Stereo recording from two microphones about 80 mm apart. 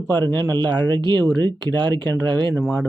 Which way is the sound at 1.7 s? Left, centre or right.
Right.